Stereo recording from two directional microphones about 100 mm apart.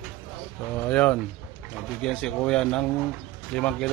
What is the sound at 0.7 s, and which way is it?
Speech, 20° left (ahead or behind).